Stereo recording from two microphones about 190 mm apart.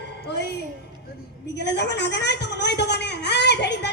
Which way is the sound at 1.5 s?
65° left (ahead or behind).